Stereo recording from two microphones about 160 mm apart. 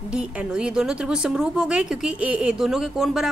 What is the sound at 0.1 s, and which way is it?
A woman's voice, 5° right (ahead or behind).